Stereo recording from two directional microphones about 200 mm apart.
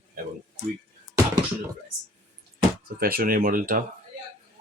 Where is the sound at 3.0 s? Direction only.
50° right (ahead or behind).